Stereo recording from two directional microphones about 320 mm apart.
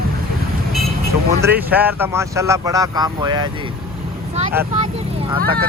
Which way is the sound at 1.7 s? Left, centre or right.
Centre.